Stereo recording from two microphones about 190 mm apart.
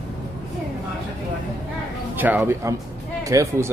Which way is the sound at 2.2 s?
10° right (ahead or behind).